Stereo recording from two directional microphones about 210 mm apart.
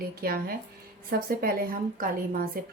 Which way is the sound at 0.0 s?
45° right (ahead or behind).